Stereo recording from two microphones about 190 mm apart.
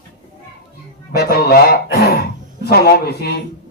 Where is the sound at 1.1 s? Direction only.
55° left (ahead or behind).